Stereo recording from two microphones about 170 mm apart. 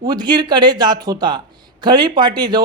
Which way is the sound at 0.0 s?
25° right (ahead or behind).